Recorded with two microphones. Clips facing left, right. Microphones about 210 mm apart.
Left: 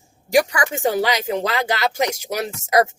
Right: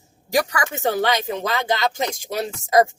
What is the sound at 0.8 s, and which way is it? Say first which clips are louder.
Speech: even; 15° left (ahead or behind).